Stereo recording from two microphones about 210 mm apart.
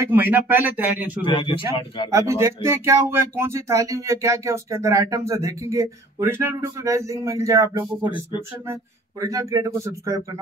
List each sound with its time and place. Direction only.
0.0 s speech: 10° right (ahead or behind)
1.2 s speech: 25° left (ahead or behind)
2.0 s speech: 15° right (ahead or behind)
9.2 s speech: 15° right (ahead or behind)